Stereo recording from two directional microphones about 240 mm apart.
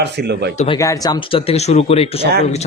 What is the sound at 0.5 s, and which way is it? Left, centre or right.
Speech, centre.